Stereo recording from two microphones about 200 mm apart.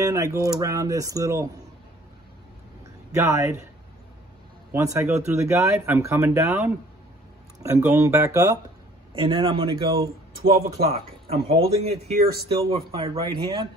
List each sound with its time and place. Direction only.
0.0 s speech: 15° right (ahead or behind)
3.1 s speech: 15° right (ahead or behind)
4.7 s speech: 15° right (ahead or behind)